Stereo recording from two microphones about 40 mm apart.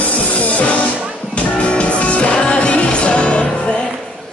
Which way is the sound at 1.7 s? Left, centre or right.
Left.